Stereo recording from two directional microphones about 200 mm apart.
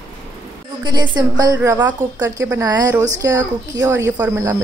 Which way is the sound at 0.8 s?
20° right (ahead or behind).